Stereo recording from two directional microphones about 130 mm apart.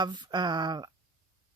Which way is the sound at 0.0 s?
35° right (ahead or behind).